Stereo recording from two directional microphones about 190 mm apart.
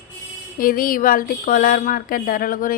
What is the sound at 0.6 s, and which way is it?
A woman's voice, 50° left (ahead or behind).